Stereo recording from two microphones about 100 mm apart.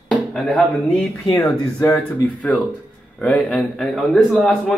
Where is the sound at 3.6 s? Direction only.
Centre (ahead or behind).